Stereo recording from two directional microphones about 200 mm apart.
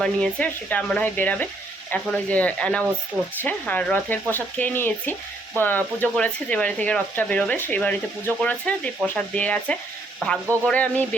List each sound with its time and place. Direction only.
0.0 s speech: 5° left (ahead or behind)